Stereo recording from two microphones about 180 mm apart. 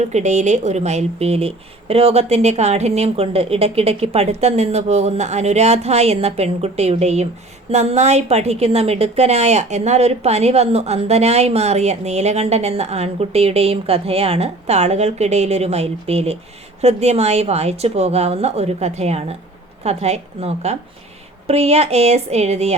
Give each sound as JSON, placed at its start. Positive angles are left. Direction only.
{"t": 0.1, "sound": "a woman's voice", "side_deg": -40}